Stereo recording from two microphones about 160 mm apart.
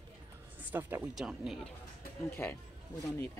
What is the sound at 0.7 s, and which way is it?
Speech, 10° right (ahead or behind).